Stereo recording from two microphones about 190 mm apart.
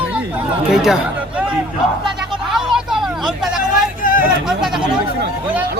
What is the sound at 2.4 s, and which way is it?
Vehicle, centre (ahead or behind).